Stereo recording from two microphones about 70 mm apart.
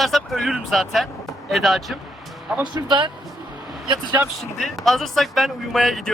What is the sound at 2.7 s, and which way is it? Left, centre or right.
Speech, right.